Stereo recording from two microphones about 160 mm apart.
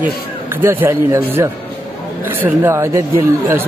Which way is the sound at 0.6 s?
15° right (ahead or behind).